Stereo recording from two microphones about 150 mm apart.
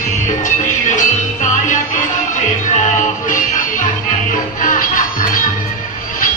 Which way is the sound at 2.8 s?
60° left (ahead or behind).